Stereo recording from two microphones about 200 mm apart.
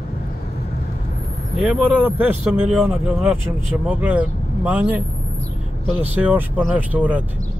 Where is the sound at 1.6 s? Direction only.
5° right (ahead or behind).